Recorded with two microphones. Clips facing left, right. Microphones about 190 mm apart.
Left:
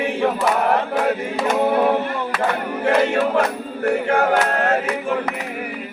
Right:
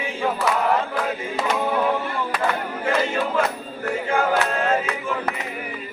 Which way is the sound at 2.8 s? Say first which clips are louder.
Left 6 dB; 65° left (ahead or behind).